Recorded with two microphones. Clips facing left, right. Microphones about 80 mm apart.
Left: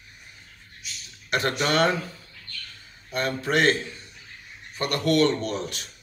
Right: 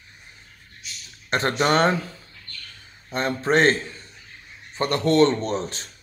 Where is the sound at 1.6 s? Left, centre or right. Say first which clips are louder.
Right 4 dB; right.